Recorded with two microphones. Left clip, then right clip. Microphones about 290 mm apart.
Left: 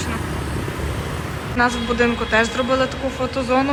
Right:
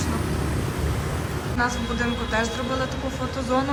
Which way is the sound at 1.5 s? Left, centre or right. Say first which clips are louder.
Left 7 dB; centre.